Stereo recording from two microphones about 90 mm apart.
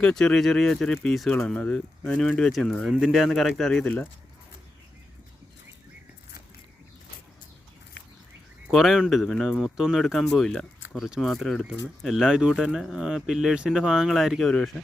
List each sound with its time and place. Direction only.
0.0 s speech: 5° left (ahead or behind)
3.7 s speech: 10° left (ahead or behind)
8.7 s speech: centre (ahead or behind)